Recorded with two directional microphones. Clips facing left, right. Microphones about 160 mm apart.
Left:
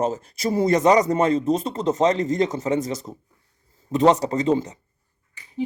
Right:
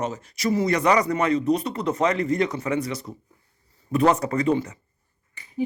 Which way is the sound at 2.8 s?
45° left (ahead or behind).